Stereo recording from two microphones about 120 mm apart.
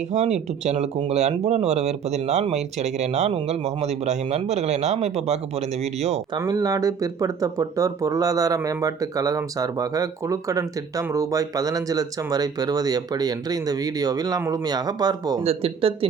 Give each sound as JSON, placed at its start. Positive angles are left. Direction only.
{"t": 0.1, "sound": "speech", "side_deg": -70}
{"t": 6.5, "sound": "speech", "side_deg": -30}
{"t": 15.4, "sound": "speech", "side_deg": -55}